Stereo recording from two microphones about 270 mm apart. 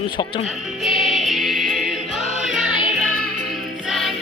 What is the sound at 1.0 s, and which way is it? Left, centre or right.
Choir, centre.